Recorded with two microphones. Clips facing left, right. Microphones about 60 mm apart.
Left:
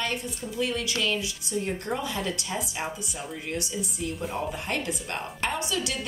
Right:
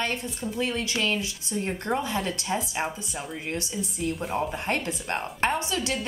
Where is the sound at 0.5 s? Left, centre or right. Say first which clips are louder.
Even; right.